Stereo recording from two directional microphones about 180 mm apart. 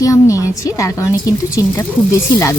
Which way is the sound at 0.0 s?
20° left (ahead or behind).